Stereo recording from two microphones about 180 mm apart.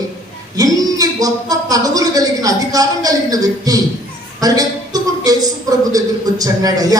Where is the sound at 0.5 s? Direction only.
20° right (ahead or behind).